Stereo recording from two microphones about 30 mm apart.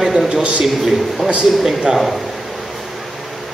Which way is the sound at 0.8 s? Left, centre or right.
Centre.